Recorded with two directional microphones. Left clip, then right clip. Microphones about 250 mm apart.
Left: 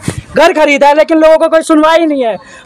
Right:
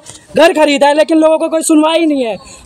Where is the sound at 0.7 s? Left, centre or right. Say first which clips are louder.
Left 3 dB; centre.